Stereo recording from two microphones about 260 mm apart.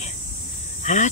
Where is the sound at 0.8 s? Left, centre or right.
Left.